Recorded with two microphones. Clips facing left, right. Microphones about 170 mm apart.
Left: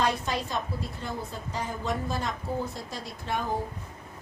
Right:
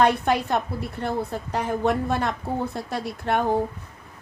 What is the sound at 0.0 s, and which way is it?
A woman's voice, 60° right (ahead or behind).